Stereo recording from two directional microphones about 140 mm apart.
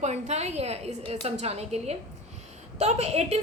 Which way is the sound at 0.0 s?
50° right (ahead or behind).